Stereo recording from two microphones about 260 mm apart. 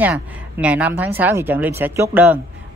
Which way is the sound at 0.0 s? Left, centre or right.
Centre.